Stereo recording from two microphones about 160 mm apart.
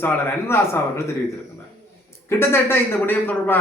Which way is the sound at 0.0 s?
15° left (ahead or behind).